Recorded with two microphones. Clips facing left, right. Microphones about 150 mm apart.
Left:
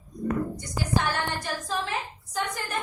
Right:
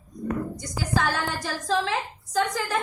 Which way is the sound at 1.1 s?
90° right.